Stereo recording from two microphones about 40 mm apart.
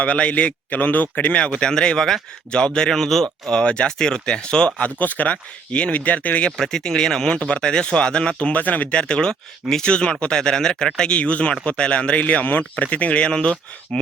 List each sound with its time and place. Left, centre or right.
0.0 s speech: left
1.4 s speech: left; by 3.5 s centre
3.5 s speech: left
4.8 s speech: left
6.6 s speech: centre
7.3 s speech: left
8.5 s speech: left
9.0 s speech: left
12.2 s speech: left